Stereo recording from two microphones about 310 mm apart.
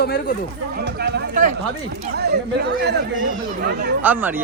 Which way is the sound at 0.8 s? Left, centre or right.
Right.